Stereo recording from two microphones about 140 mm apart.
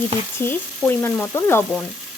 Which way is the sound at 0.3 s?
15° left (ahead or behind).